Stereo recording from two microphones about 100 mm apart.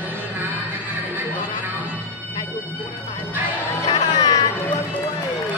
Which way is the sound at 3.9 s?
50° left (ahead or behind).